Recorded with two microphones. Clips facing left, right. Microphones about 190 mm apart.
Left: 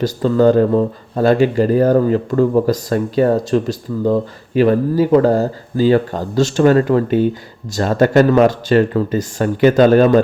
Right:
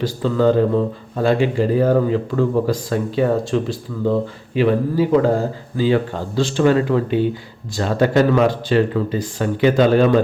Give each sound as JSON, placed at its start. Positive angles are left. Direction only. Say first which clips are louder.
{"t": 0.0, "sound": "speech", "louder": "left 4 dB", "side_deg": 45}